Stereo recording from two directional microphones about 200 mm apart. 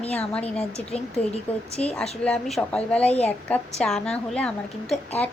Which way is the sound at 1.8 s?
5° left (ahead or behind).